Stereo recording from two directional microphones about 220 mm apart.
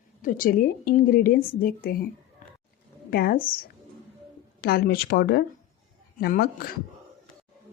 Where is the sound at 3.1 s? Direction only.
45° left (ahead or behind).